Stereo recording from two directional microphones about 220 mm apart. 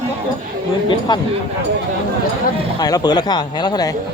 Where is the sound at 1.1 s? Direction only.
20° left (ahead or behind).